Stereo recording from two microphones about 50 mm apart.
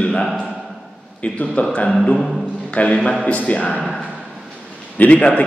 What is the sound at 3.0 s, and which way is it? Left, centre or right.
Speech, centre.